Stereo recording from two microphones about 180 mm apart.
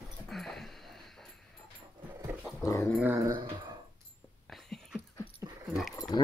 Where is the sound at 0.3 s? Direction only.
Centre (ahead or behind).